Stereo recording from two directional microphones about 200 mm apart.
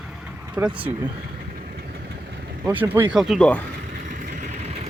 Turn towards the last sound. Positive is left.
turn(degrees=-35)  # may be behind; listen again after turning